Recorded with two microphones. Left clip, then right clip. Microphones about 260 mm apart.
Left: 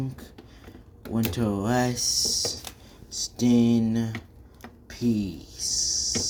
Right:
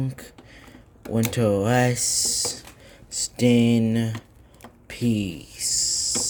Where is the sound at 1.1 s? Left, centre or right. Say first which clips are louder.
Right 6 dB; right.